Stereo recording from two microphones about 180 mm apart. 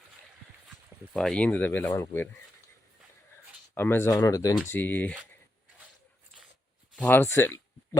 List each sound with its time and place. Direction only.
1.1 s speech: 5° left (ahead or behind)
3.8 s speech: 15° left (ahead or behind)
6.9 s speech: 10° left (ahead or behind)